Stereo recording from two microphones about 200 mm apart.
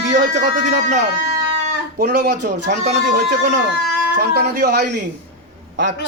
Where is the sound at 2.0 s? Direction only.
55° right (ahead or behind).